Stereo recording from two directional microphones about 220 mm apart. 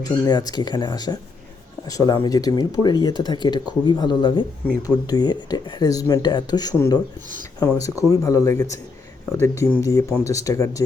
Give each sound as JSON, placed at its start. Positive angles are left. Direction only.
{"t": 0.0, "sound": "speech", "side_deg": 20}